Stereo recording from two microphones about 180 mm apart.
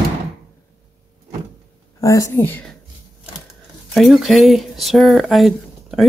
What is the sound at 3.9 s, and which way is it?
Speech, centre (ahead or behind).